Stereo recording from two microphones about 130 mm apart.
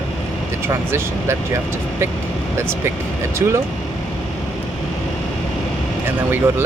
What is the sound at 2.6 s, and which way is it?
Speech, 20° right (ahead or behind).